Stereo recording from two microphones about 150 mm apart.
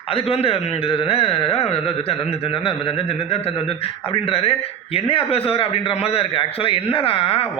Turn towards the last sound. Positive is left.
turn(degrees=40)  # may be behind; listen again after turning